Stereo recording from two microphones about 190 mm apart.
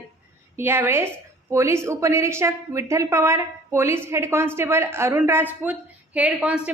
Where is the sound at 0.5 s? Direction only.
10° right (ahead or behind).